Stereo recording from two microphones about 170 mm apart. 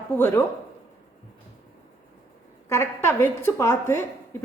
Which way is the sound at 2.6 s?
15° left (ahead or behind).